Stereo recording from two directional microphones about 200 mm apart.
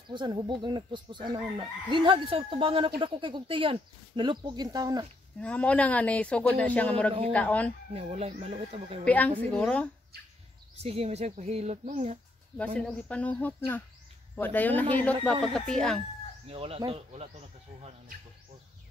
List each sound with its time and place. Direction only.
0.1 s chicken: 25° right (ahead or behind)
5.4 s speech: 5° left (ahead or behind)
7.9 s chicken: 30° right (ahead or behind)
9.0 s speech: 10° left (ahead or behind)
10.8 s speech: 30° right (ahead or behind)
12.5 s speech: 5° left (ahead or behind)
16.4 s chicken: 30° right (ahead or behind)